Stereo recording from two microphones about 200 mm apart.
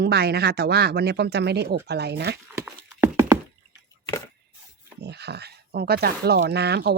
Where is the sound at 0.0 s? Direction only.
50° right (ahead or behind).